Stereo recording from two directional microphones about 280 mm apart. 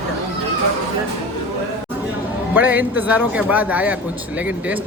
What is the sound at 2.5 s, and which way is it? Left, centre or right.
A man's voice, centre.